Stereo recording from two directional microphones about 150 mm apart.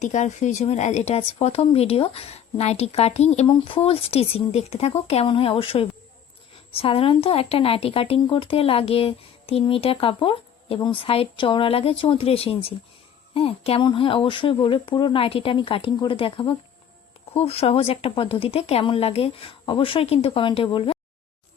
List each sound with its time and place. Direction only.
0.0 s speech: 55° left (ahead or behind); by 20.9 s 40° left (ahead or behind)